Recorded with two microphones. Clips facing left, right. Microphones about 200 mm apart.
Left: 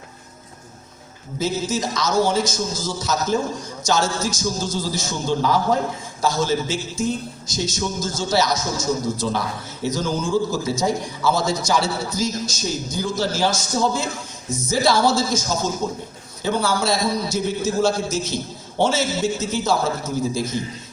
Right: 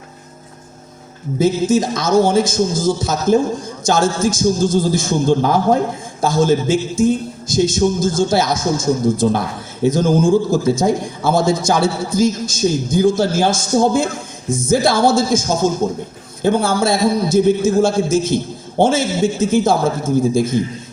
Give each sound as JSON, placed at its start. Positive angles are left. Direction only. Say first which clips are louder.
{"t": 1.4, "sound": "a man's voice", "louder": "right 9 dB", "side_deg": -50}